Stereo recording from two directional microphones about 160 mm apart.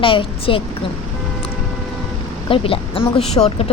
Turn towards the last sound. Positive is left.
turn(degrees=40)  # may be behind; listen again after turning